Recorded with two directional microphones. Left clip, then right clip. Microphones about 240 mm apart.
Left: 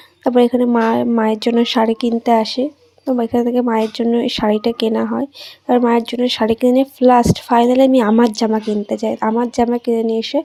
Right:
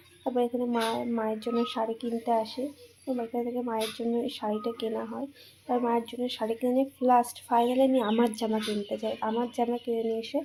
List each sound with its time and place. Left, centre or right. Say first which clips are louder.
0.3 s speech: left 15 dB; left